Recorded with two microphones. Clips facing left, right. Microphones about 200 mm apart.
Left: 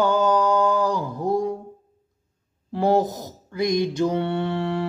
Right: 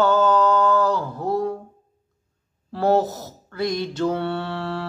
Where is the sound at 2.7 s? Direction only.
15° left (ahead or behind).